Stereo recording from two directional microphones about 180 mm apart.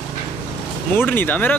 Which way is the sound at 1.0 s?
10° left (ahead or behind).